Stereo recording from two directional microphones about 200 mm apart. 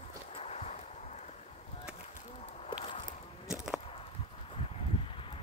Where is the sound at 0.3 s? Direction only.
30° left (ahead or behind).